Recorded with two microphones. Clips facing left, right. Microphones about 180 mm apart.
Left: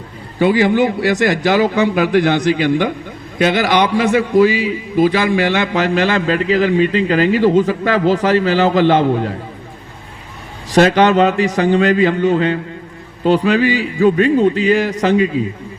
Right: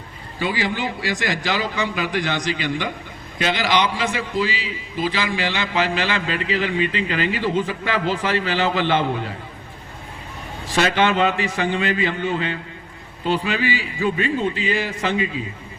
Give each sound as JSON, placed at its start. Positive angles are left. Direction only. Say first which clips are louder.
{"t": 0.3, "sound": "a man's voice", "louder": "left 12 dB", "side_deg": 55}
{"t": 10.8, "sound": "a man's voice", "louder": "left 8 dB", "side_deg": 45}